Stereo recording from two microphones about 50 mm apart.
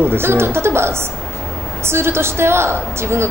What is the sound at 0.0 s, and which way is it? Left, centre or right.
A woman's voice, right.